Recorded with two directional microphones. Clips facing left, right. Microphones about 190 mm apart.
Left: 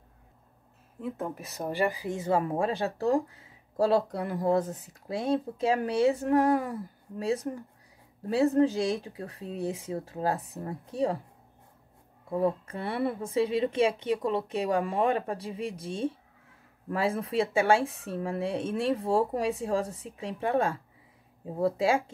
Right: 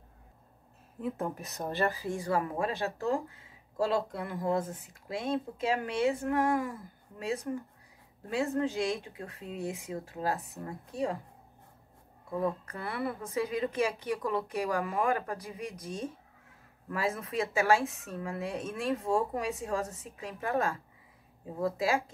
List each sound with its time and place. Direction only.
1.0 s speech: centre (ahead or behind); by 11.1 s 30° left (ahead or behind)
12.3 s speech: 30° left (ahead or behind)